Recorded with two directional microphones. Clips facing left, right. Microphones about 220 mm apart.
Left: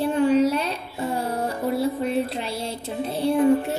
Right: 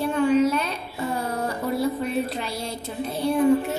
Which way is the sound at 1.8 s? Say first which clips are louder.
Left 1 dB; 25° left (ahead or behind).